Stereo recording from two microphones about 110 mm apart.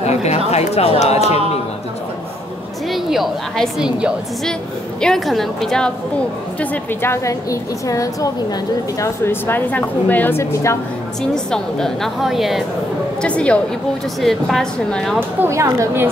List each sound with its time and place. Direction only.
0.0 s a sound: 80° left
0.5 s speech: 70° left (ahead or behind)
2.9 s a woman's voice: centre (ahead or behind)
5.0 s a woman's voice: centre (ahead or behind)
6.6 s a woman's voice: 15° left (ahead or behind)
11.3 s a woman's voice: 5° left (ahead or behind)
13.2 s a woman's voice: 10° left (ahead or behind)
15.1 s a woman's voice: 20° right (ahead or behind)